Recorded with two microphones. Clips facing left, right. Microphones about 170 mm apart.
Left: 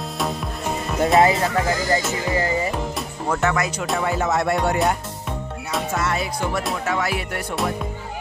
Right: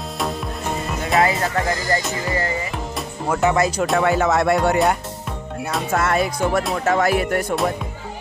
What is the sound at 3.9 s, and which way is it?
Music, 85° right.